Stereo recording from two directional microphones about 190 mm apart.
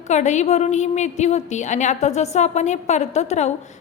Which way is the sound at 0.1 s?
40° left (ahead or behind).